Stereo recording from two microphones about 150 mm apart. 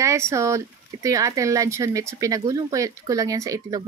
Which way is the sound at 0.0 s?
20° right (ahead or behind).